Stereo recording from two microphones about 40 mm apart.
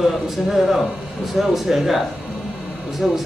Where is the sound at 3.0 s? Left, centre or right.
Centre.